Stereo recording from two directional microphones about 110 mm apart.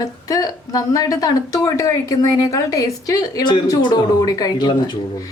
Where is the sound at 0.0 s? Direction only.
35° left (ahead or behind).